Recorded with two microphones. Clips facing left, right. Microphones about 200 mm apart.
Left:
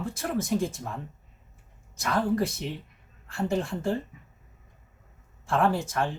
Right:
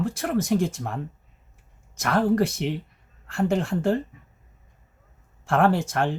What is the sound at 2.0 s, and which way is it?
Speech, 75° right (ahead or behind).